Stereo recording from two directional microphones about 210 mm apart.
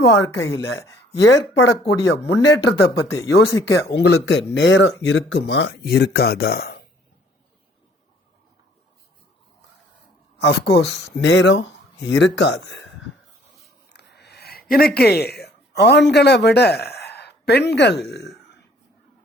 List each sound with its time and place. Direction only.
0.0 s speech: 70° left (ahead or behind); by 6.8 s 50° left (ahead or behind)
10.3 s speech: 55° left (ahead or behind)
13.9 s a sound: 50° left (ahead or behind)